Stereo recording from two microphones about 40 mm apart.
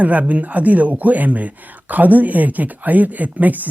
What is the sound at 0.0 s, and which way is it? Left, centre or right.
Speech, right.